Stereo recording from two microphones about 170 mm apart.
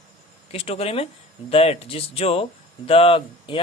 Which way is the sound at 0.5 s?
35° left (ahead or behind).